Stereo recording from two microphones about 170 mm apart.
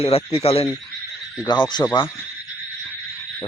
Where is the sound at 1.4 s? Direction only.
25° left (ahead or behind).